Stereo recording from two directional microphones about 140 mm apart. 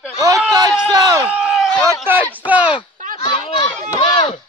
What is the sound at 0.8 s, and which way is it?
Speech, 25° right (ahead or behind).